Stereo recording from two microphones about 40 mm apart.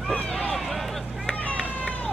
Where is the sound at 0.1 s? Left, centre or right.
Left.